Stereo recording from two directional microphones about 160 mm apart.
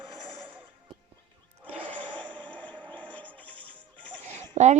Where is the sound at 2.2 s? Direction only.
10° left (ahead or behind).